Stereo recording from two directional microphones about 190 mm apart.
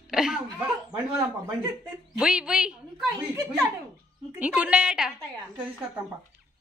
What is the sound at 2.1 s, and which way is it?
Speech, 5° right (ahead or behind).